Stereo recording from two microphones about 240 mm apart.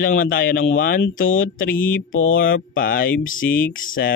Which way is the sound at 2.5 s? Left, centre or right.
Left.